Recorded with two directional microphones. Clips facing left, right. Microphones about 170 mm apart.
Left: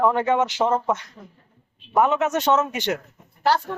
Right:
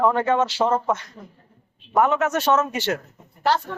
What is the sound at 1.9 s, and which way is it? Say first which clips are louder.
A man's voice: even; 20° left (ahead or behind).